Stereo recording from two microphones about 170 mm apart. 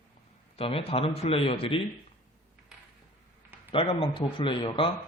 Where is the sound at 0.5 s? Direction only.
35° left (ahead or behind).